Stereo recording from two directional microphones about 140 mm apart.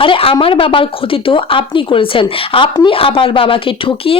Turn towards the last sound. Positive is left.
turn(degrees=40)  # may be behind; listen again after turning